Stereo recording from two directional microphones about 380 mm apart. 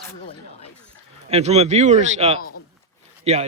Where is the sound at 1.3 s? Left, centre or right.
Centre.